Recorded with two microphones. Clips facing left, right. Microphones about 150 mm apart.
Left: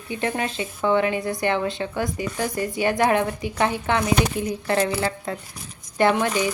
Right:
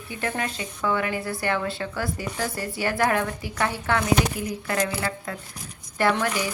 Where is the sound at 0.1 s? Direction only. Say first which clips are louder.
Left 3 dB; 20° left (ahead or behind).